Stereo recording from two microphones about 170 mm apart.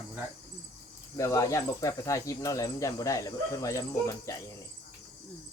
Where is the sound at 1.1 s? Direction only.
20° left (ahead or behind).